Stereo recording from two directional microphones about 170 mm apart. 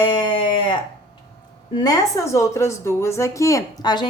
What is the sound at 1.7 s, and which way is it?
A woman's voice, 25° left (ahead or behind).